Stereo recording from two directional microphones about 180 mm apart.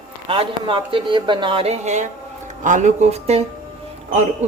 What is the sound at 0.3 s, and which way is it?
A woman's voice, 30° right (ahead or behind).